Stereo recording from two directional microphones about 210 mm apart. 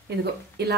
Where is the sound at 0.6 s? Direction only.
50° right (ahead or behind).